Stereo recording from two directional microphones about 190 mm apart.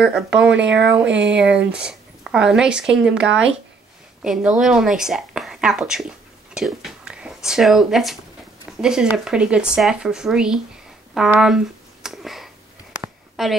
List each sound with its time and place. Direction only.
0.0 s speech: 5° right (ahead or behind)
1.1 s speech: 65° right (ahead or behind)
1.7 s a woman's voice: 5° right (ahead or behind)
11.1 s a sound: 5° right (ahead or behind)
13.4 s a woman's voice: centre (ahead or behind)